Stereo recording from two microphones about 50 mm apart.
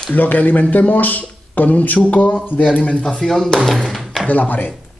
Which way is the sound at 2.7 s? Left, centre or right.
Centre.